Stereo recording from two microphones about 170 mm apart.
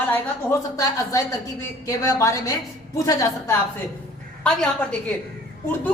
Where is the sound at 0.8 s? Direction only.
20° left (ahead or behind).